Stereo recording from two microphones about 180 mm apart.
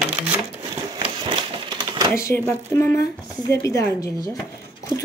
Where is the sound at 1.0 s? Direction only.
25° right (ahead or behind).